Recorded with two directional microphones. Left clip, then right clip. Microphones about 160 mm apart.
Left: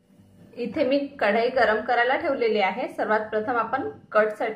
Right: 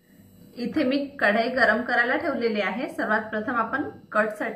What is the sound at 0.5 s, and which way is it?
A woman's voice, 50° left (ahead or behind).